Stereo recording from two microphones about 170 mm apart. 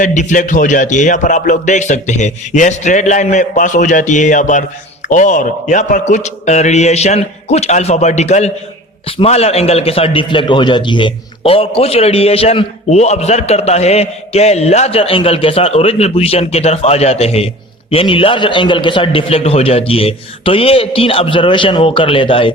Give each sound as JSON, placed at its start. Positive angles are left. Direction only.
{"t": 0.0, "sound": "a man's voice", "side_deg": 45}